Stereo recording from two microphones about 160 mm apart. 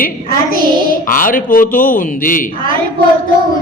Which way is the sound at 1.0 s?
60° left (ahead or behind).